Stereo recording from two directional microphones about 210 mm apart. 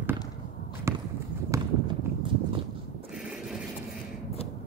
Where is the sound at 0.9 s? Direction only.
15° right (ahead or behind).